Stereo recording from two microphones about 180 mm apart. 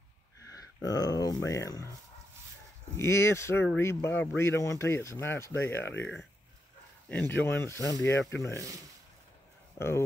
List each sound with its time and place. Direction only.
0.8 s speech: 20° left (ahead or behind)
3.0 s speech: 15° left (ahead or behind)
8.2 s speech: 5° left (ahead or behind)
8.5 s speech: 20° right (ahead or behind)
9.8 s speech: 15° left (ahead or behind)